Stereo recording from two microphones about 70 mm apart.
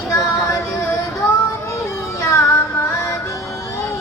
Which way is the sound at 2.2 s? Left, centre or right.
Left.